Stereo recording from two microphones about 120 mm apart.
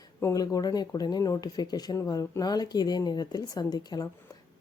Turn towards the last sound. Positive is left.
turn(degrees=35)  # may be behind; listen again after turning